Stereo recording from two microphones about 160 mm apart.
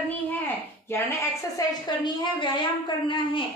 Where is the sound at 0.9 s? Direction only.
15° left (ahead or behind).